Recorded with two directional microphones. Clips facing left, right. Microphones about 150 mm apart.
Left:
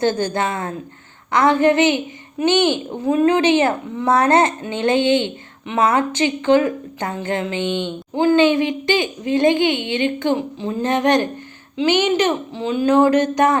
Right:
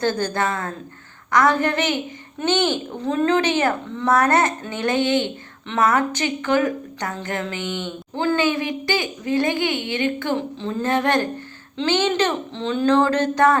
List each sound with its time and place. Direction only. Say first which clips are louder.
0.0 s a woman's voice: left 3 dB; 20° left (ahead or behind)